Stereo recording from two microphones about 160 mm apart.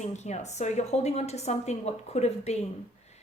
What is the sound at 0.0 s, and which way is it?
Speech, 45° left (ahead or behind).